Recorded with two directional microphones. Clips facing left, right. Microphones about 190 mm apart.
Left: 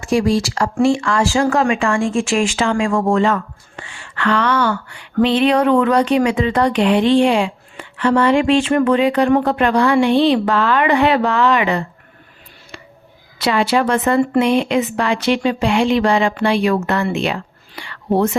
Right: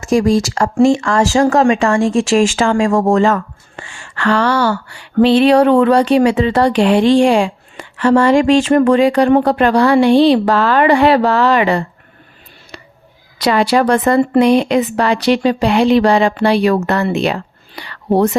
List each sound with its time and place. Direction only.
0.0 s speech: 45° right (ahead or behind)
13.4 s speech: 40° right (ahead or behind)